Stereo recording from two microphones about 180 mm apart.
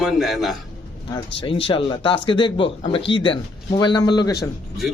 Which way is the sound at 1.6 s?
30° left (ahead or behind).